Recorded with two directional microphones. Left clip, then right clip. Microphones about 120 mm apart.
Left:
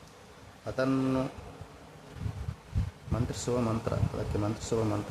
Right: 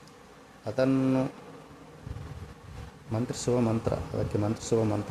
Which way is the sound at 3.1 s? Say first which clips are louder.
Right 3 dB; 25° right (ahead or behind).